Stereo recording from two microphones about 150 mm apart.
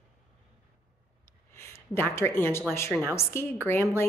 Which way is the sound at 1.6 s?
15° left (ahead or behind).